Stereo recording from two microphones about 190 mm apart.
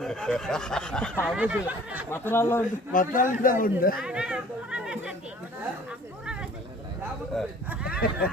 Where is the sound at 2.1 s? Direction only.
10° left (ahead or behind).